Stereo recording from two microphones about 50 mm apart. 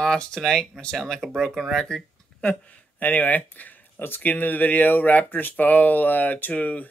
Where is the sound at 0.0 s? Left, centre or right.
Centre.